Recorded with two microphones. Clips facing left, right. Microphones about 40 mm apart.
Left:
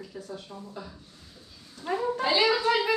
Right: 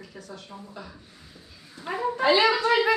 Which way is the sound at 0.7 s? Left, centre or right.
Centre.